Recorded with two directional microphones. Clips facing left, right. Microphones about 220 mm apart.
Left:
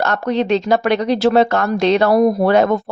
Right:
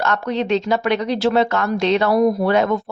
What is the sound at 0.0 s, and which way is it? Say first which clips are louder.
Speech: left 3 dB; 40° left (ahead or behind).